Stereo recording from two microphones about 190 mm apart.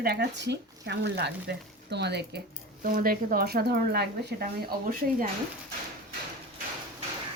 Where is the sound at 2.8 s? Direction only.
50° right (ahead or behind).